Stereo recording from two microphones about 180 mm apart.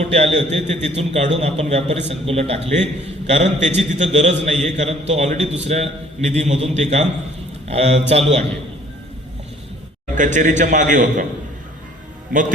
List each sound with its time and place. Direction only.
0.0 s a man's voice: 35° right (ahead or behind)
10.2 s a man's voice: 45° right (ahead or behind)
12.3 s a man's voice: 45° right (ahead or behind)